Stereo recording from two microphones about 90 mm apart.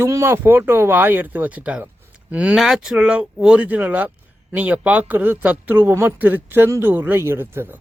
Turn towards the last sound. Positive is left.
turn(degrees=-25)  # may be behind; listen again after turning